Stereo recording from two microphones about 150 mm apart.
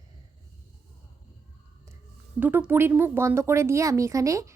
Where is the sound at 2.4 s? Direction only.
10° right (ahead or behind).